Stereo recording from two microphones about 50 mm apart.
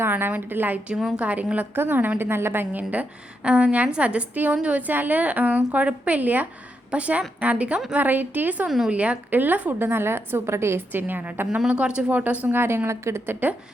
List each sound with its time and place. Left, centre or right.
0.1 s a woman's voice: right
1.1 s a woman's voice: right
1.7 s a woman's voice: right
2.9 s a woman's voice: right
6.9 s a woman's voice: right
7.9 s a woman's voice: right
8.6 s speech: centre
8.9 s a woman's voice: right
9.3 s a woman's voice: right
9.7 s a woman's voice: right
11.7 s a woman's voice: right
12.1 s a woman's voice: right
12.5 s a woman's voice: right